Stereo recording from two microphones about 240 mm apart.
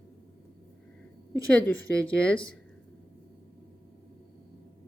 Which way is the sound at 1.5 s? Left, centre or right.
Centre.